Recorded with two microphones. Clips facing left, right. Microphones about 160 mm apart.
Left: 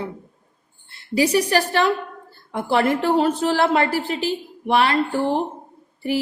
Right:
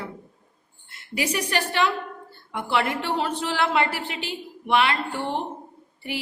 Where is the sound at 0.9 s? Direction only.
30° left (ahead or behind).